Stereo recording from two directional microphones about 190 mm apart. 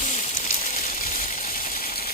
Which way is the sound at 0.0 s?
40° left (ahead or behind).